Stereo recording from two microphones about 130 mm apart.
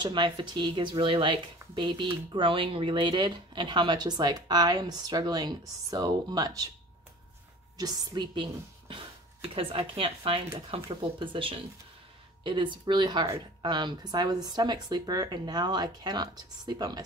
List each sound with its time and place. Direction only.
0.0 s speech: 35° right (ahead or behind)
7.7 s speech: 30° right (ahead or behind)